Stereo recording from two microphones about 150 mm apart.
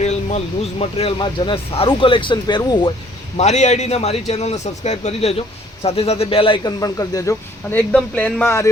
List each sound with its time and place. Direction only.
0.0 s speech: 50° left (ahead or behind); by 2.9 s 30° left (ahead or behind)
3.3 s a man's voice: 50° left (ahead or behind); by 8.7 s 15° left (ahead or behind)